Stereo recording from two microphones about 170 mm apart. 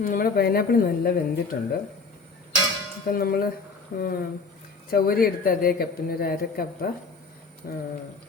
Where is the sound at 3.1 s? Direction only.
60° left (ahead or behind).